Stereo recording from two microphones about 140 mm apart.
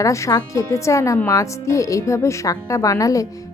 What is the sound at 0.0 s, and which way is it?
Speech, 20° left (ahead or behind).